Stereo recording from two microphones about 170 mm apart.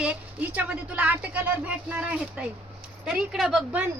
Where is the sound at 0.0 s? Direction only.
10° right (ahead or behind).